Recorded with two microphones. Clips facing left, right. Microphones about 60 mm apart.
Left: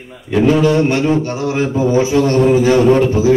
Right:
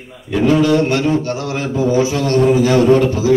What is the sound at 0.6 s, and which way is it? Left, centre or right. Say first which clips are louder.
Mantra: left 1 dB; left.